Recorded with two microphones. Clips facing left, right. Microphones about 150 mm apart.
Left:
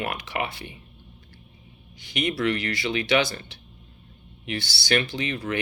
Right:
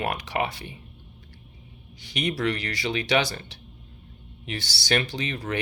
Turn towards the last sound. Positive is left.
turn(degrees=-40)  # may be behind; listen again after turning